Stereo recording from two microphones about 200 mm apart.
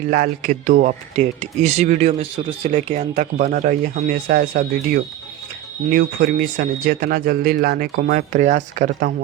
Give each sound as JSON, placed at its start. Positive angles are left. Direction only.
{"t": 0.1, "sound": "speech", "side_deg": -45}